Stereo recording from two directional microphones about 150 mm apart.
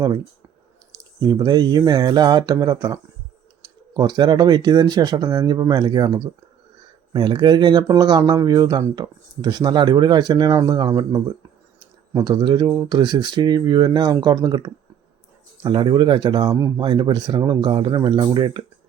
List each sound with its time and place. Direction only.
1.2 s speech: 25° right (ahead or behind)